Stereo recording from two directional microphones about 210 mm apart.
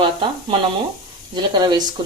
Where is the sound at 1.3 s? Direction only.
20° right (ahead or behind).